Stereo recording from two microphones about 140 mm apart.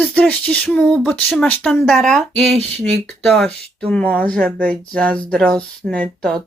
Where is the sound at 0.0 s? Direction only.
10° left (ahead or behind).